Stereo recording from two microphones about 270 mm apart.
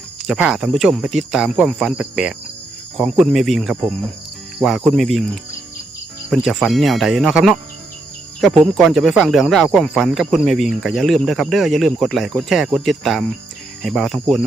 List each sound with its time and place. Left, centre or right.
0.3 s speech: centre